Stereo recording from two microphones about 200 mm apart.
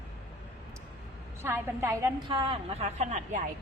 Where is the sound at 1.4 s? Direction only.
10° right (ahead or behind); by 3.4 s 35° right (ahead or behind).